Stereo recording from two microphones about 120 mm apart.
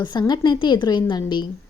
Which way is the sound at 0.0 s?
35° left (ahead or behind).